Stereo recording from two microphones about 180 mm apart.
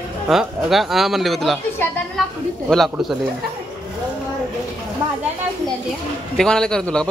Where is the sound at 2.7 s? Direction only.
Centre (ahead or behind).